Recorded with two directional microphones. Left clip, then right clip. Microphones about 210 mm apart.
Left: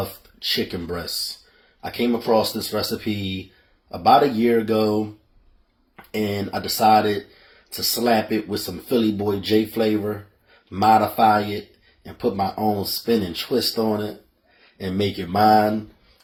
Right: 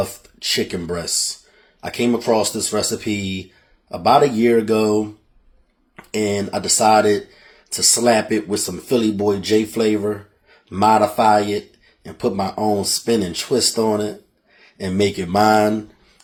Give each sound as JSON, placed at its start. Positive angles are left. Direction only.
{"t": 0.0, "sound": "speech", "side_deg": -25}